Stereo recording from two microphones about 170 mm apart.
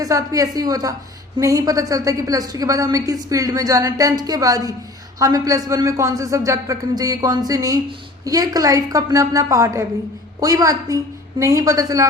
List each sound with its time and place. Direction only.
0.0 s a woman's voice: 20° right (ahead or behind)